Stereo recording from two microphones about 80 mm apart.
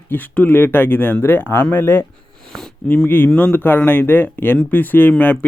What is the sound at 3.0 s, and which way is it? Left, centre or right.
Speech, left.